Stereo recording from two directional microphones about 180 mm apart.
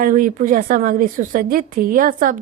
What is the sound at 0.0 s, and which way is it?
A woman's voice, 50° right (ahead or behind).